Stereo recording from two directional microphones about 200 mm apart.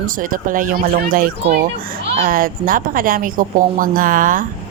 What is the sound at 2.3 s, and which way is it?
Speech, 45° right (ahead or behind).